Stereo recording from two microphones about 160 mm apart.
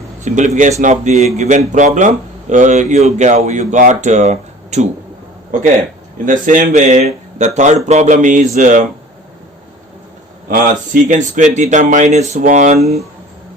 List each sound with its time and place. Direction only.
0.3 s speech: 50° right (ahead or behind)
6.2 s a man's voice: 55° right (ahead or behind)
7.0 s a man's voice: 45° right (ahead or behind)
10.5 s speech: 55° right (ahead or behind)